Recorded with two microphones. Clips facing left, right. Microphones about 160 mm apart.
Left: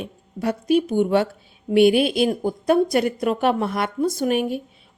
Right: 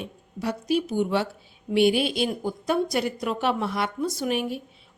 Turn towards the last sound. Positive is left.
turn(degrees=50)  # may be behind; listen again after turning